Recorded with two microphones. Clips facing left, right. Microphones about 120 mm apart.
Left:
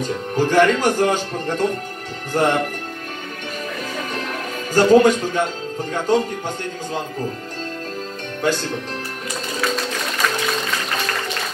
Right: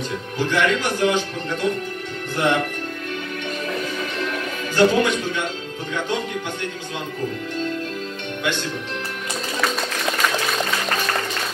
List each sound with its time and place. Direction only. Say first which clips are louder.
0.0 s speech: left 5 dB; 45° left (ahead or behind)
4.7 s speech: left 5 dB; 40° left (ahead or behind)
8.4 s speech: left 5 dB; 35° left (ahead or behind)